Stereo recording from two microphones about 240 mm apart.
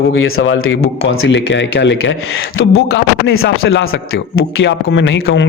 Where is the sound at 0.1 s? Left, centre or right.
Left.